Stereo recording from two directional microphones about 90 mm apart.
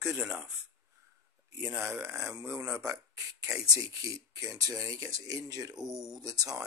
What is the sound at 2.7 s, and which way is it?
Speech, 40° right (ahead or behind).